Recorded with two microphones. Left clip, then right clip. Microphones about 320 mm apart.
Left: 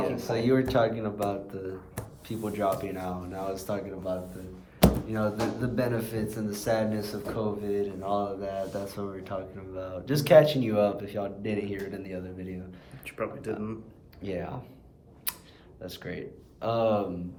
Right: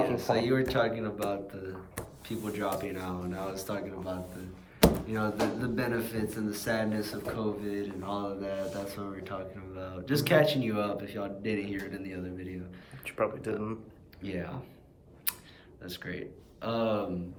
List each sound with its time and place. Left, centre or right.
0.0 s speech: centre
13.1 s speech: centre
14.2 s speech: centre
15.3 s a sound: centre
15.8 s speech: centre